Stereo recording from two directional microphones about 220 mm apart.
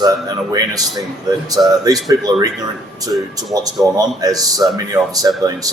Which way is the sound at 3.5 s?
15° right (ahead or behind).